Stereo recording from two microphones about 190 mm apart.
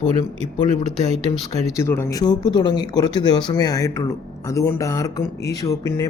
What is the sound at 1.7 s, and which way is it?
Speech, 15° left (ahead or behind).